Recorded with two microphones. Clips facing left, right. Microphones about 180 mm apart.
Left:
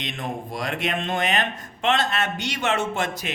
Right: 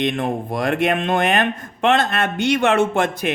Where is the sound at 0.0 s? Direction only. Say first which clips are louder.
Right 10 dB; 55° right (ahead or behind).